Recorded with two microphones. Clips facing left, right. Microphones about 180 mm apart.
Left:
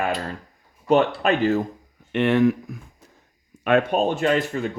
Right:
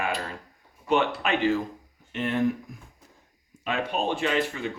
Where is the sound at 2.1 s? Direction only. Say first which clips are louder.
Left 7 dB; 75° left (ahead or behind).